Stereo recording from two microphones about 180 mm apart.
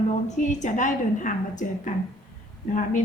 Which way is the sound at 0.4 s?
45° left (ahead or behind).